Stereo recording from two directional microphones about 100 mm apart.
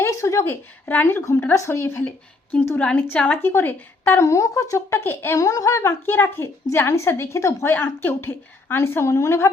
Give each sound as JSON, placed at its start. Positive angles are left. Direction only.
{"t": 0.0, "sound": "a woman's voice", "side_deg": 30}